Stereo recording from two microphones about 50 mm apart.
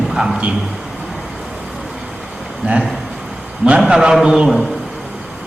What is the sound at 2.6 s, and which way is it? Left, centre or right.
Speech, right.